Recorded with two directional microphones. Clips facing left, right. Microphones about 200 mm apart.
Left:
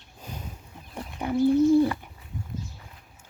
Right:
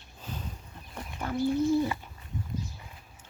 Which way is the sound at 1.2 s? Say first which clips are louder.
Left 5 dB; 15° left (ahead or behind).